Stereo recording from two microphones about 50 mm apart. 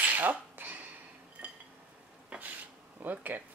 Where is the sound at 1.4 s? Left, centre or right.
Right.